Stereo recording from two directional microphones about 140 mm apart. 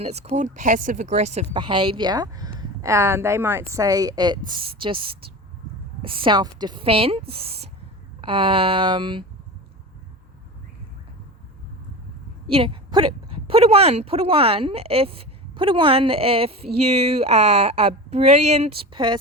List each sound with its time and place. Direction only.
0.0 s speech: 50° right (ahead or behind)
1.5 s speech: 30° right (ahead or behind)
12.5 s a woman's voice: 40° right (ahead or behind)